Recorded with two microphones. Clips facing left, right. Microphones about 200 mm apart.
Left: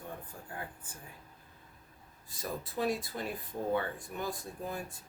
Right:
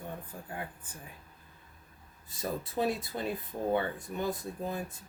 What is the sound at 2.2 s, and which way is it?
Speech, 25° right (ahead or behind).